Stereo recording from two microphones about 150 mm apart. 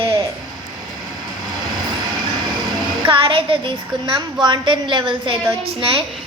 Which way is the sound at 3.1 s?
35° right (ahead or behind).